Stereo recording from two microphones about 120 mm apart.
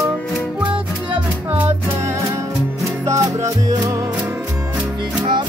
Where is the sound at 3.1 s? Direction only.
25° right (ahead or behind).